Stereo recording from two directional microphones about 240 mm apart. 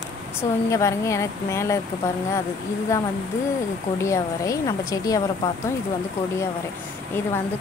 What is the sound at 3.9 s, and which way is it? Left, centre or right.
Speech, centre.